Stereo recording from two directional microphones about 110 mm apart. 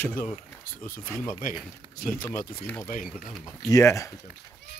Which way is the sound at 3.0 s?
Centre (ahead or behind).